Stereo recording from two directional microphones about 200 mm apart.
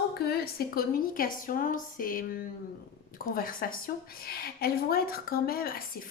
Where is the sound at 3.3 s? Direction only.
45° left (ahead or behind).